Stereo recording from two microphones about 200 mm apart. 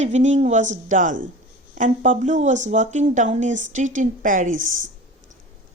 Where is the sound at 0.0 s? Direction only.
35° right (ahead or behind).